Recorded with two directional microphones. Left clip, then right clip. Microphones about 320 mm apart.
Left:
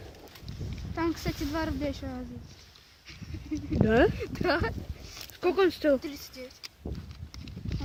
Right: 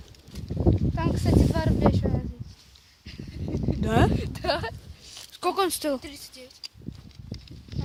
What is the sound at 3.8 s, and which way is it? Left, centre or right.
Speech, centre.